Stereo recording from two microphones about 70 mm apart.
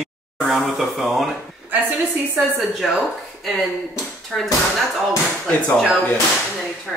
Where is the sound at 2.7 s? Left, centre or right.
Centre.